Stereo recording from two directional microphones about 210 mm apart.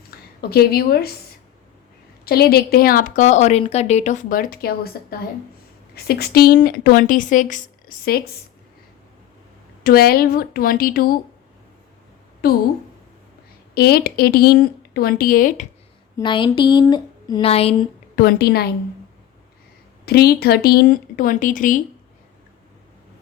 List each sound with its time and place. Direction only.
0.1 s a sound: 50° left (ahead or behind)
0.5 s speech: 50° left (ahead or behind)
2.2 s speech: 50° left (ahead or behind)
5.9 s speech: 50° left (ahead or behind)
9.8 s speech: 45° left (ahead or behind)
12.4 s speech: 45° left (ahead or behind)
13.7 s speech: 50° left (ahead or behind)
16.1 s a woman's voice: 20° left (ahead or behind)
18.2 s speech: 45° left (ahead or behind)
20.1 s speech: 50° left (ahead or behind)